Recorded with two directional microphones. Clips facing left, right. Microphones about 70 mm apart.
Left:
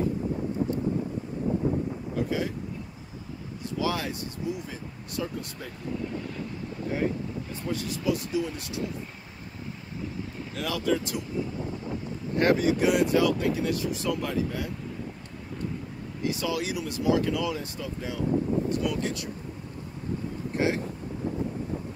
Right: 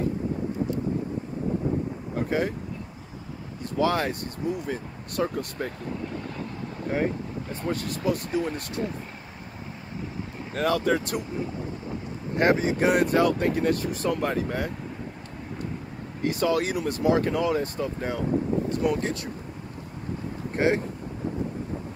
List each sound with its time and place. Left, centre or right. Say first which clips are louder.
2.1 s vehicle: right 3 dB; right
3.7 s speech: right 5 dB; right
6.9 s speech: right 2 dB; right
10.5 s speech: right 4 dB; right
12.4 s speech: right 1 dB; right
12.7 s speech: right 1 dB; right
16.2 s speech: right 5 dB; right
20.5 s speech: right 4 dB; right